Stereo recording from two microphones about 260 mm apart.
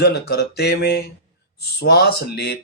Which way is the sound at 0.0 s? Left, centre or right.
Left.